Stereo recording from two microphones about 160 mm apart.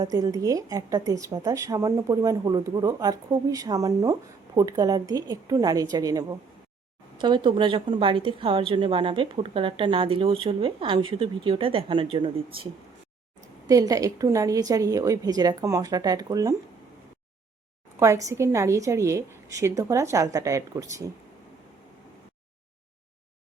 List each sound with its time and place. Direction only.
0.0 s a woman's voice: 20° right (ahead or behind)
13.7 s speech: 20° right (ahead or behind)
18.0 s speech: 20° right (ahead or behind)